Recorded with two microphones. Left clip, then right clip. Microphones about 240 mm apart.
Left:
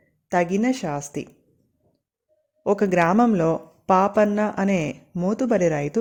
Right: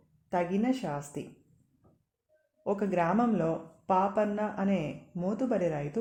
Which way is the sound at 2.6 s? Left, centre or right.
Left.